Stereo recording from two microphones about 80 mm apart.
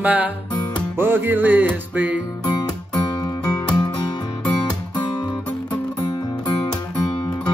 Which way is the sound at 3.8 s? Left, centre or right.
Left.